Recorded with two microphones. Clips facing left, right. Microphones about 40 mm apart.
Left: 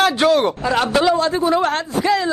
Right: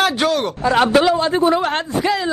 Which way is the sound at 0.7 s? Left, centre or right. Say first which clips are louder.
Right 5 dB; right.